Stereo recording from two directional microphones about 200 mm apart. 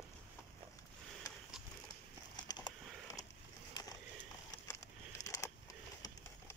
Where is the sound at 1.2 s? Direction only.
20° left (ahead or behind).